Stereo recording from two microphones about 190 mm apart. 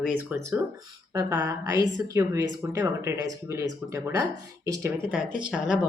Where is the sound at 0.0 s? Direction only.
10° right (ahead or behind).